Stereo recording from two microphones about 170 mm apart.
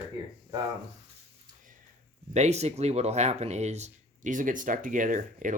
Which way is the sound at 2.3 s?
40° right (ahead or behind).